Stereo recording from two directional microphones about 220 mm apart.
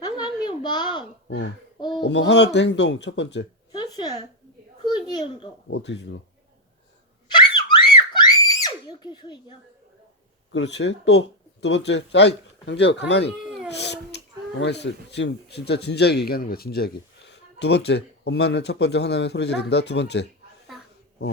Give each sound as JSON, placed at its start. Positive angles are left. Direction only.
{"t": 0.0, "sound": "a sound", "side_deg": 20}
{"t": 2.0, "sound": "a man's voice", "side_deg": 50}
{"t": 3.7, "sound": "a sound", "side_deg": 15}
{"t": 5.6, "sound": "a man's voice", "side_deg": 50}
{"t": 7.3, "sound": "screaming", "side_deg": 20}
{"t": 10.5, "sound": "a man's voice", "side_deg": 50}